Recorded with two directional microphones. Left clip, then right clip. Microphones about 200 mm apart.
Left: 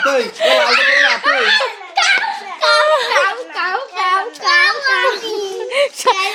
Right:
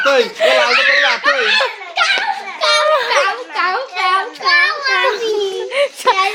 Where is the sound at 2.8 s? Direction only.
5° left (ahead or behind).